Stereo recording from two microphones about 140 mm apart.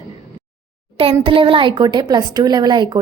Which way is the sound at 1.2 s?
35° right (ahead or behind).